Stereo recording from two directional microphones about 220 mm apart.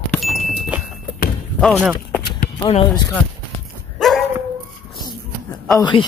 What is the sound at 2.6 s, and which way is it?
Speech, 20° left (ahead or behind).